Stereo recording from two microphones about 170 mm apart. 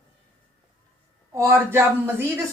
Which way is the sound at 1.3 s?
15° right (ahead or behind).